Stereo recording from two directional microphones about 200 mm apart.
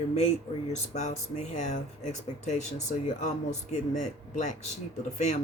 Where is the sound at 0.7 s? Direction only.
35° left (ahead or behind).